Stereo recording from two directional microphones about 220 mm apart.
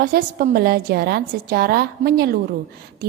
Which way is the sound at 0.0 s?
40° right (ahead or behind).